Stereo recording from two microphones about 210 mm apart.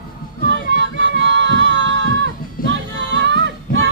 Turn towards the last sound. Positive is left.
turn(degrees=-60)  # may be behind; listen again after turning